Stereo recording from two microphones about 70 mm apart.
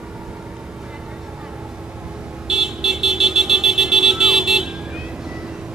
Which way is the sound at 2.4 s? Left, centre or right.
Centre.